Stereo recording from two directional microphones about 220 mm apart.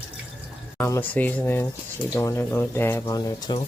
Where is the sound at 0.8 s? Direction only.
10° left (ahead or behind).